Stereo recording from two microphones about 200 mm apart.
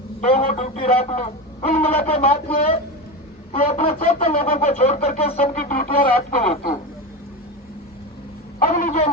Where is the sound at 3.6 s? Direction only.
30° left (ahead or behind).